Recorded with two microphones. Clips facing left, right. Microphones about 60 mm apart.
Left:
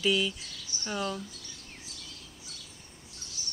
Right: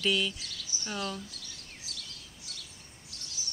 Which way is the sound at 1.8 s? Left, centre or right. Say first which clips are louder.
Right 3 dB; right.